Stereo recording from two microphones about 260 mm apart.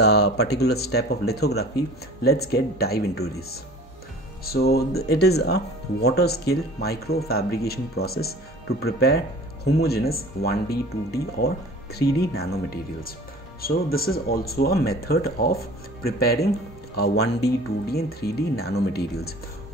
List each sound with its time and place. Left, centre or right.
0.0 s speech: left